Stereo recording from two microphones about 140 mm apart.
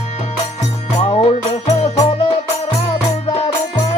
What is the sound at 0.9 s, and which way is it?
Music, 50° left (ahead or behind).